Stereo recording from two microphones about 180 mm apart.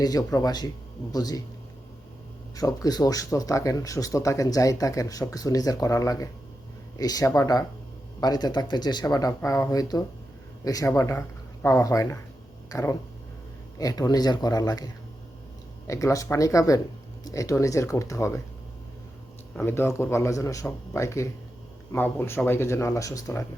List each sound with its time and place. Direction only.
0.0 s speech: 20° left (ahead or behind)
2.6 s speech: 20° left (ahead or behind)
15.9 s speech: 15° left (ahead or behind)
19.5 s speech: 15° left (ahead or behind)